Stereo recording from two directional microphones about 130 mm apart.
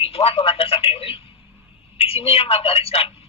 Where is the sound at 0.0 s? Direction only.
45° left (ahead or behind).